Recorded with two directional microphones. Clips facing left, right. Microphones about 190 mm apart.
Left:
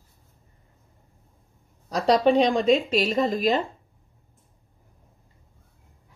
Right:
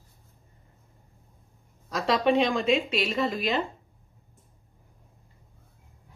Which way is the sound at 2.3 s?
35° left (ahead or behind).